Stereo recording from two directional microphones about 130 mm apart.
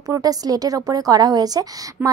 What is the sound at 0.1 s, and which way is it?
Speech, 30° right (ahead or behind).